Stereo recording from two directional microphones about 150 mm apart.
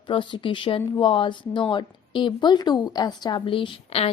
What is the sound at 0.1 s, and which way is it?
A woman's voice, 35° left (ahead or behind).